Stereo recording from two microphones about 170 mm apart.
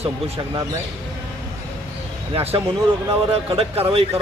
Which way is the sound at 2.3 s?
35° right (ahead or behind).